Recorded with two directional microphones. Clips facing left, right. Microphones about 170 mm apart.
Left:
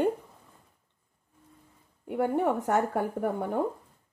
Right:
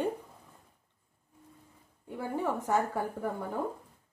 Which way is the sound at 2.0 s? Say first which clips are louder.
Left 7 dB; 65° left (ahead or behind).